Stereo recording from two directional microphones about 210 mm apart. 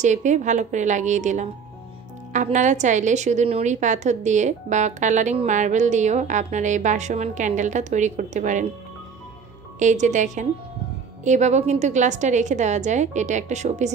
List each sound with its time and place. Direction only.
0.0 s a woman's voice: 35° right (ahead or behind)
9.8 s a woman's voice: 35° right (ahead or behind)